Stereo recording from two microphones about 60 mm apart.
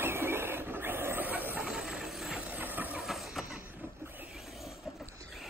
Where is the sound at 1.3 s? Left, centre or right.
Right.